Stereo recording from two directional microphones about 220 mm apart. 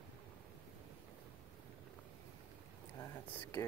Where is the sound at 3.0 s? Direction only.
10° left (ahead or behind).